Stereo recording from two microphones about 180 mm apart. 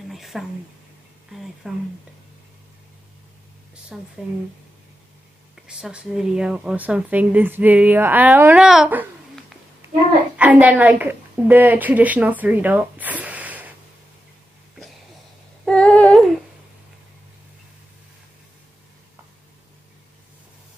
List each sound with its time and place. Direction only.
0.1 s a sound: centre (ahead or behind)
1.3 s speech: centre (ahead or behind)
3.9 s speech: 5° right (ahead or behind)
5.7 s a woman's voice: 5° right (ahead or behind)
15.6 s humming: 5° left (ahead or behind)